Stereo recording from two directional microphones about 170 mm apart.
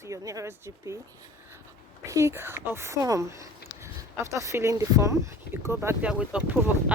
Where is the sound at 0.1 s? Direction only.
20° right (ahead or behind).